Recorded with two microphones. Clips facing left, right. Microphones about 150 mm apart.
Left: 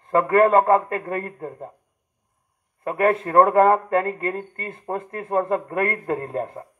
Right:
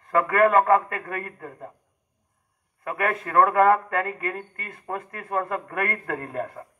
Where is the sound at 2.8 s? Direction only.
30° left (ahead or behind).